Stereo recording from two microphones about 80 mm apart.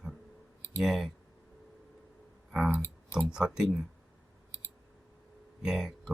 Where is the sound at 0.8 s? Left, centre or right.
Centre.